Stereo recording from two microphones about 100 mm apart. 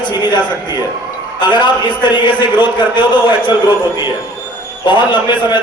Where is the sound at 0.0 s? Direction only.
45° left (ahead or behind).